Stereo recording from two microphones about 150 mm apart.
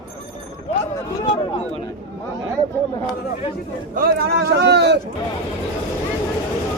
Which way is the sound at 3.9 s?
85° right.